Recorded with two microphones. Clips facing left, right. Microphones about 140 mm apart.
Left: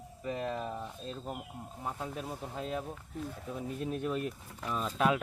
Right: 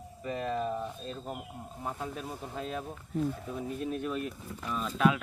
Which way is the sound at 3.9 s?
25° left (ahead or behind).